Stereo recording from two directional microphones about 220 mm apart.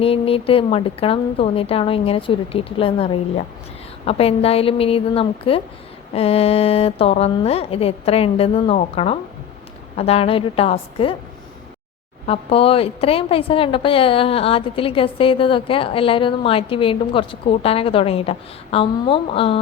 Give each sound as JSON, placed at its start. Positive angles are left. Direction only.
{"t": 0.0, "sound": "speech", "side_deg": 25}
{"t": 12.2, "sound": "speech", "side_deg": 25}